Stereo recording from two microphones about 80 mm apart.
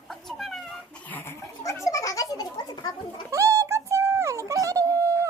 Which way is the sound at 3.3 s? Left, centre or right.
Right.